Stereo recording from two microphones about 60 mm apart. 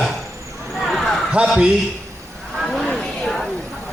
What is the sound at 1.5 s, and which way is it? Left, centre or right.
Speech, centre.